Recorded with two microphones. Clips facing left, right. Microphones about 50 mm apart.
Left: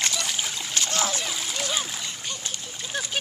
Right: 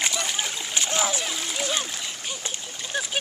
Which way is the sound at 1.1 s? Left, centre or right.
Centre.